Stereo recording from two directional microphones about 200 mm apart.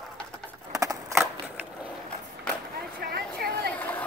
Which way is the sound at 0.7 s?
15° right (ahead or behind).